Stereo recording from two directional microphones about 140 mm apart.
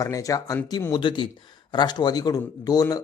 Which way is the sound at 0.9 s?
35° left (ahead or behind).